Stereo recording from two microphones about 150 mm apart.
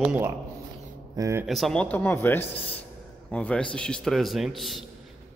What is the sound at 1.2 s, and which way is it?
Speech, 20° right (ahead or behind).